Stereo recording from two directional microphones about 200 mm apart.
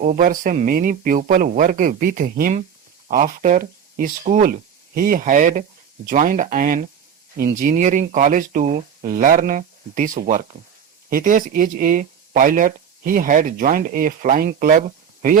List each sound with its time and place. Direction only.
0.0 s speech: 40° right (ahead or behind)